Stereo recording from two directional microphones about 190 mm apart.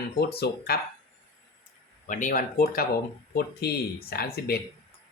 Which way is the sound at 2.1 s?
45° left (ahead or behind).